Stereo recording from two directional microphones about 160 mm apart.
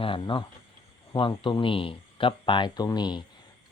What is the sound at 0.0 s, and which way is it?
Speech, 35° left (ahead or behind).